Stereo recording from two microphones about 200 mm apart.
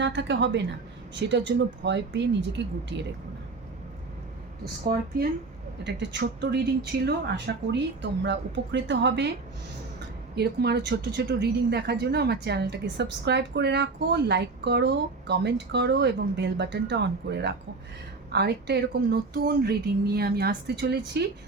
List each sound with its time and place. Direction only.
0.0 s speech: 60° right (ahead or behind)
5.8 s speech: 60° right (ahead or behind)
10.3 s speech: 55° right (ahead or behind)